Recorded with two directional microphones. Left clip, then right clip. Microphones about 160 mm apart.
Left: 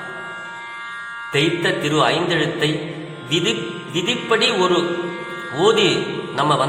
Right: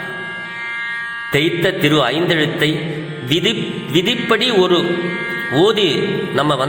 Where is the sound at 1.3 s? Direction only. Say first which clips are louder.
Right 2 dB; 25° right (ahead or behind).